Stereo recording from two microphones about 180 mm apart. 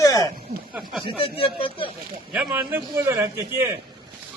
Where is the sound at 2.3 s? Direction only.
10° right (ahead or behind).